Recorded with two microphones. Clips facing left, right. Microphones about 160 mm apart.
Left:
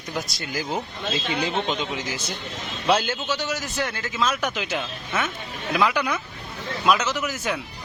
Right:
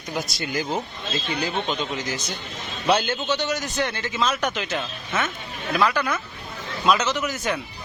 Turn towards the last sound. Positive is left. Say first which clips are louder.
# right 1 dB
turn(degrees=5)  # may be behind; listen again after turning